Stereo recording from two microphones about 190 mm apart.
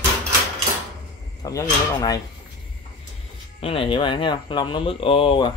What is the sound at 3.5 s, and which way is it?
Speech, 30° left (ahead or behind).